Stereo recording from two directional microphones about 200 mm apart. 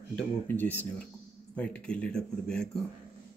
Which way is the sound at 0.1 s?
10° left (ahead or behind).